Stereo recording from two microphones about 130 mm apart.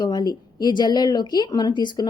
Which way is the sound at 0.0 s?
30° left (ahead or behind).